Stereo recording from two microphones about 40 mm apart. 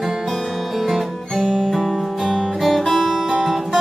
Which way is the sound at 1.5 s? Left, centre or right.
Centre.